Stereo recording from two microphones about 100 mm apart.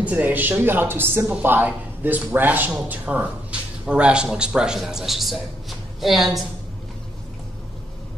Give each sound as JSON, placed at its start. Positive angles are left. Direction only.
{"t": 0.0, "sound": "a man's voice", "side_deg": -15}